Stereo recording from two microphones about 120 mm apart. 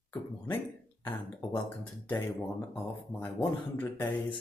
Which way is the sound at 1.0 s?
40° left (ahead or behind).